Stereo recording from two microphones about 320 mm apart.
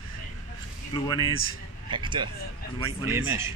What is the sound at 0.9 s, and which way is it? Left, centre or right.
Speech, centre.